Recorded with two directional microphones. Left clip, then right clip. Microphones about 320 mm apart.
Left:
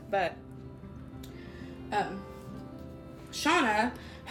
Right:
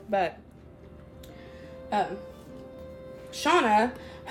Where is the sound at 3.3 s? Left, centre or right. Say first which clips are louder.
Right 4 dB; right.